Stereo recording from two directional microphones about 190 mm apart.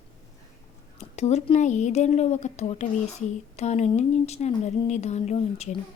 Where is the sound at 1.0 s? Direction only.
35° left (ahead or behind).